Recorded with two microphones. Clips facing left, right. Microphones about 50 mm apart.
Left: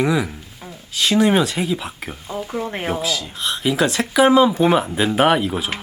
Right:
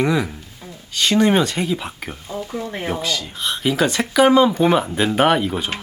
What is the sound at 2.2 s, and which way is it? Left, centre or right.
Speech, left.